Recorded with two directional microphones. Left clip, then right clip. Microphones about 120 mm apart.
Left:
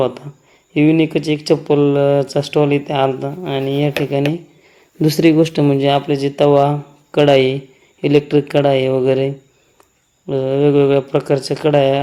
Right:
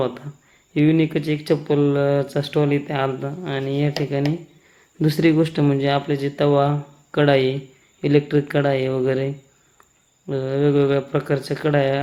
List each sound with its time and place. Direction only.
0.7 s speech: 20° left (ahead or behind)